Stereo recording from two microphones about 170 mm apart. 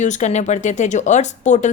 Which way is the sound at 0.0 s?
45° left (ahead or behind).